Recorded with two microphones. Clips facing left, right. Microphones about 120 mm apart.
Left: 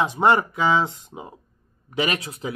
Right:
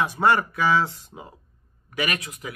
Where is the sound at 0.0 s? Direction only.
20° left (ahead or behind).